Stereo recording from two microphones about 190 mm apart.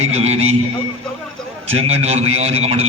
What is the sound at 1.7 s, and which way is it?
A man's voice, 35° right (ahead or behind).